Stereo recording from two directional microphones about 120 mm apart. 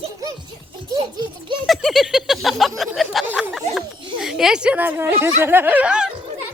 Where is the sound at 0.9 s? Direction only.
35° right (ahead or behind).